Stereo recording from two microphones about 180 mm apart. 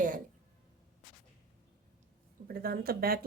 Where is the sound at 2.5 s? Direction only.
55° right (ahead or behind).